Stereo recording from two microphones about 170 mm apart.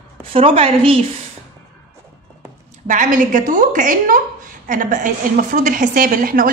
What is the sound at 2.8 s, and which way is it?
A woman's voice, 50° right (ahead or behind).